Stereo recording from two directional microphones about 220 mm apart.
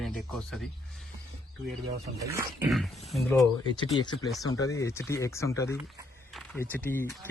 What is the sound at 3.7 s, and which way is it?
Speech, 20° left (ahead or behind).